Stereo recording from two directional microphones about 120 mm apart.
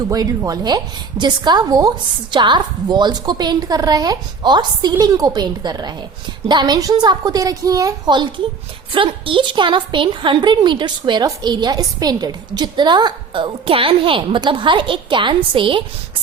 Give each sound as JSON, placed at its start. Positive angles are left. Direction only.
{"t": 0.1, "sound": "a woman's voice", "side_deg": -30}